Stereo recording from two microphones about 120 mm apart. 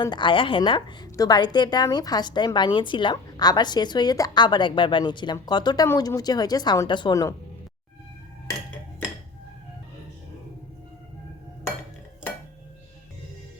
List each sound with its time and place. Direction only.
0.0 s a woman's voice: 40° left (ahead or behind)